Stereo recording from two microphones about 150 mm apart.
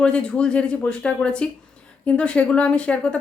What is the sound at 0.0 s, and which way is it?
Speech, 5° left (ahead or behind).